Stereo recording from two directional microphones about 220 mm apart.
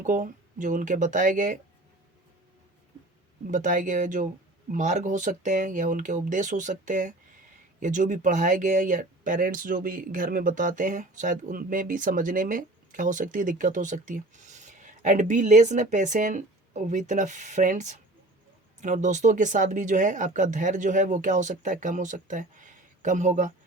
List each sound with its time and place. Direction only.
0.0 s speech: 35° right (ahead or behind)
3.5 s speech: 35° right (ahead or behind)